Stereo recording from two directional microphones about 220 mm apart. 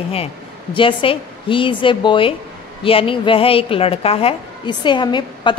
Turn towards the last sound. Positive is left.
turn(degrees=20)  # may be behind; listen again after turning